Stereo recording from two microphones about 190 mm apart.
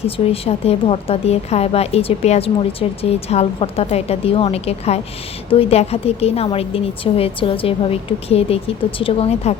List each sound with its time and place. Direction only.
0.0 s a woman's voice: 30° left (ahead or behind)